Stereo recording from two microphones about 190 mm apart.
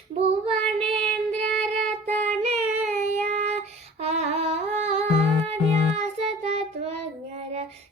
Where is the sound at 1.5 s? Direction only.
5° left (ahead or behind).